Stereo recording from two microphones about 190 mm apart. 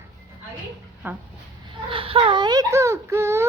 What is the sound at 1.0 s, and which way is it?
Speech, 10° right (ahead or behind).